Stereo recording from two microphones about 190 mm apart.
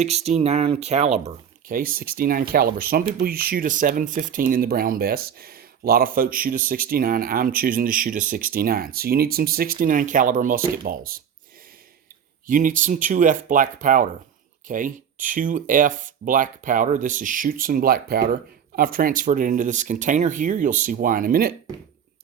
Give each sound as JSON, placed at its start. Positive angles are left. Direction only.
{"t": 0.0, "sound": "speech", "side_deg": -35}
{"t": 1.7, "sound": "speech", "side_deg": -50}
{"t": 12.5, "sound": "speech", "side_deg": -45}